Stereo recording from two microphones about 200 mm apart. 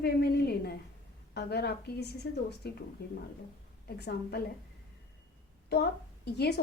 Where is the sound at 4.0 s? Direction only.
55° left (ahead or behind).